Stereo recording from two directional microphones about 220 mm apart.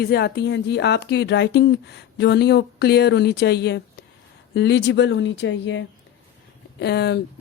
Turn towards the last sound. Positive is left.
turn(degrees=50)  # may be behind; listen again after turning